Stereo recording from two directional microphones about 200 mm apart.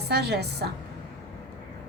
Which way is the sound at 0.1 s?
55° right (ahead or behind).